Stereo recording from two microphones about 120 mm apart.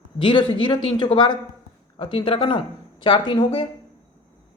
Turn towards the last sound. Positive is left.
turn(degrees=45)  # may be behind; listen again after turning